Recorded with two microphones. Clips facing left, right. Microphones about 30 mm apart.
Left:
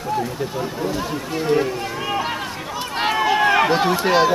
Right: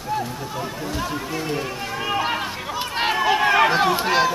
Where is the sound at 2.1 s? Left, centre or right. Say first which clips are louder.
Right 1 dB; centre.